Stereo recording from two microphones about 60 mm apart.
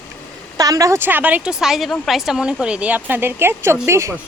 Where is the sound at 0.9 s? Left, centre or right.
Right.